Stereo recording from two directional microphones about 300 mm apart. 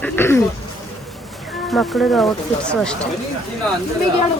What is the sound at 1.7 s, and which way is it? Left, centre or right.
Speech, centre.